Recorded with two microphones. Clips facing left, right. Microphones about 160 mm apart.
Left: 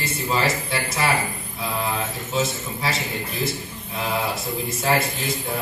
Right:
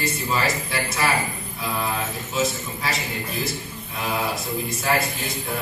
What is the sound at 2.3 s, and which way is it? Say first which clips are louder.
Speech: even; 30° left (ahead or behind).